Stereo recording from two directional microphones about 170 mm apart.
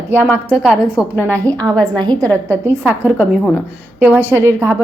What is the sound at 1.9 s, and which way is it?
Speech, 25° right (ahead or behind).